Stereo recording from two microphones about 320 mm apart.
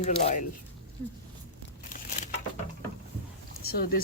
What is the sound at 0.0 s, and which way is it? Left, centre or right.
Speech, left.